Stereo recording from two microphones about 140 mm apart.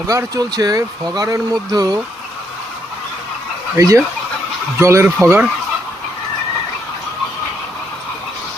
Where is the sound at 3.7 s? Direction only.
25° right (ahead or behind).